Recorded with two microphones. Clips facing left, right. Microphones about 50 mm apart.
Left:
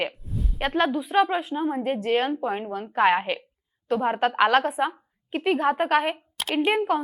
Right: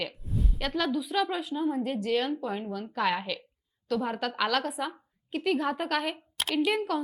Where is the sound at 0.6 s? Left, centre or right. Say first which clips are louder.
Left 6 dB; left.